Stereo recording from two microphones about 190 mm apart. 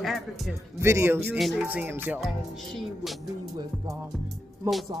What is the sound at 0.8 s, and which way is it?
Speech, 15° right (ahead or behind).